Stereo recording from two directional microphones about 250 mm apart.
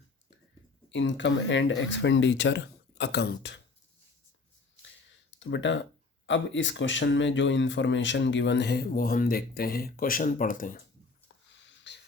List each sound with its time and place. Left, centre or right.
0.9 s speech: left
5.1 s a sound: left
6.2 s speech: left
11.6 s wheeze: left